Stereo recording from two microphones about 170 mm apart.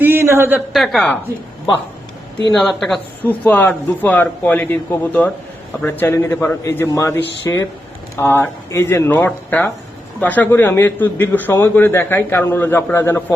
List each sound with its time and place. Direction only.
0.0 s a sound: 15° right (ahead or behind)
0.7 s speech: centre (ahead or behind)
2.6 s a man's voice: 5° left (ahead or behind)